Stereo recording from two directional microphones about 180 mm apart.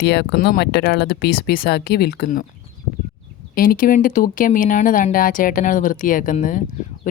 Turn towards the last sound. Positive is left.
turn(degrees=45)  # may be behind; listen again after turning